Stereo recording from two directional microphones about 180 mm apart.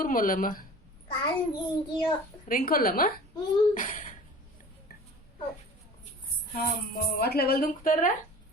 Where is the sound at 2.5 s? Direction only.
55° left (ahead or behind).